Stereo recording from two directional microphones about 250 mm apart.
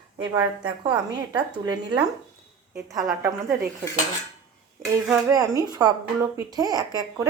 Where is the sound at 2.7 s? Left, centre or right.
Centre.